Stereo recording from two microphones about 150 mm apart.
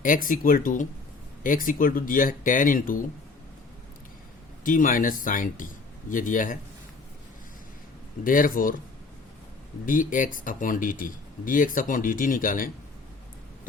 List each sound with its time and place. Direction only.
0.0 s speech: 65° left (ahead or behind)
4.6 s speech: 65° left (ahead or behind)
8.2 s speech: 65° left (ahead or behind)
9.8 s speech: 65° left (ahead or behind)